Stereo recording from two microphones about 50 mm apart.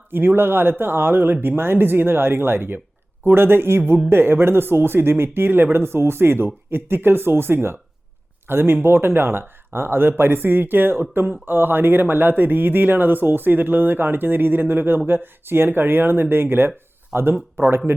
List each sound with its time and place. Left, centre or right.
0.1 s speech: right